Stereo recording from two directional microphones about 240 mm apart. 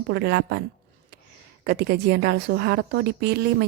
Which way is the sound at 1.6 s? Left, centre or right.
Right.